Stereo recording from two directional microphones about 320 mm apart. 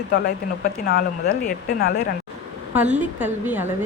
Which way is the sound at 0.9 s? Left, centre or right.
Left.